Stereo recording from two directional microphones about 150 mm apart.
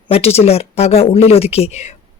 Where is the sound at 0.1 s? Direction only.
40° left (ahead or behind).